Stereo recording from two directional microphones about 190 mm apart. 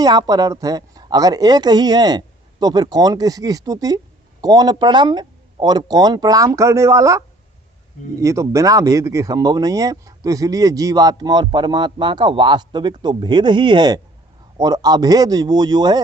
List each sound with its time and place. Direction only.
0.0 s speech: 20° right (ahead or behind)